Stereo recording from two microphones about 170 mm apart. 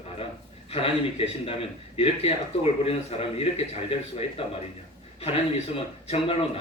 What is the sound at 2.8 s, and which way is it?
A man's voice, 35° left (ahead or behind).